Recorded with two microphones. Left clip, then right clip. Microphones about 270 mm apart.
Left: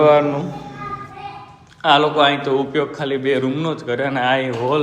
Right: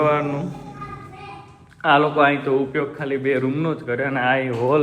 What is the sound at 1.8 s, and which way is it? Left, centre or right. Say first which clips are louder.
A man's voice: left 2 dB; centre.